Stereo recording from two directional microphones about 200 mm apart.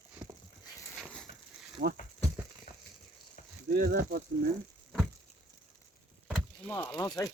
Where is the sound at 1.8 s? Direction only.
50° right (ahead or behind).